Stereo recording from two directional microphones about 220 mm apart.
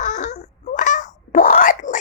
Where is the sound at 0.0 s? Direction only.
35° left (ahead or behind).